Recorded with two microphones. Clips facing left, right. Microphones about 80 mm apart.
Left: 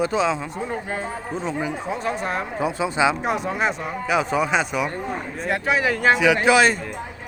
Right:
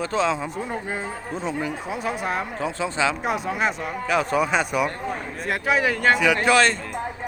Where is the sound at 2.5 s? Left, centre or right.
Centre.